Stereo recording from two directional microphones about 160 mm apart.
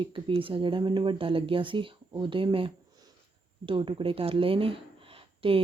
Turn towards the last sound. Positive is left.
turn(degrees=-35)  # may be behind; listen again after turning